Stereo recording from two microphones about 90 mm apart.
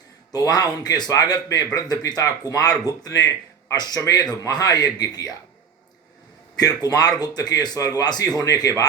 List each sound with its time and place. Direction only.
0.3 s speech: 45° left (ahead or behind)
6.6 s speech: 45° left (ahead or behind)